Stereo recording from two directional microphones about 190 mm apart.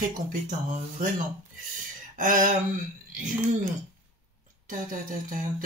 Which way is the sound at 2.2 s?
45° right (ahead or behind).